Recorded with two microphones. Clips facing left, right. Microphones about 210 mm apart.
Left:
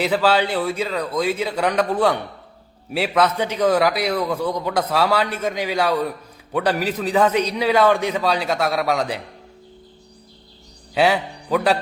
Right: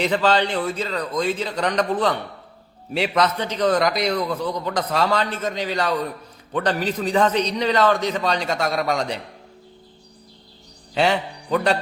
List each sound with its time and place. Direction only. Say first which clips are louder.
0.0 s a man's voice: left 1 dB; 5° left (ahead or behind)
10.9 s a man's voice: left 2 dB; 5° left (ahead or behind)